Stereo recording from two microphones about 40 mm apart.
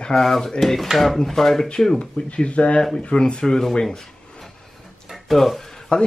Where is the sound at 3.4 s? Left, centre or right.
Centre.